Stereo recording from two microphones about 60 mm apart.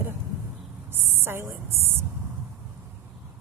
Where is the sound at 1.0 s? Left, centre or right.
Right.